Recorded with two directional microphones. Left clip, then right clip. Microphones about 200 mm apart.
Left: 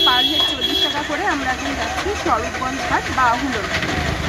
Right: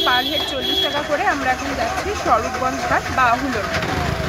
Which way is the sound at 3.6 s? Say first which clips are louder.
Even; 55° right (ahead or behind).